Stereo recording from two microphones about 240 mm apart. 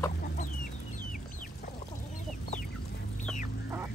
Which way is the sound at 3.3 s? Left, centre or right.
Centre.